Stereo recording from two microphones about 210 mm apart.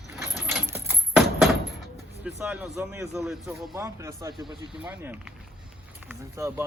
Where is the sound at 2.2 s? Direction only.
5° right (ahead or behind).